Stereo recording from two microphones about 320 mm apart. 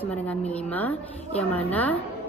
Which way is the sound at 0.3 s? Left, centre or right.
Centre.